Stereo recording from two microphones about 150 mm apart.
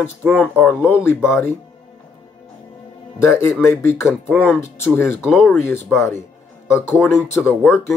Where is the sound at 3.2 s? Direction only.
15° left (ahead or behind).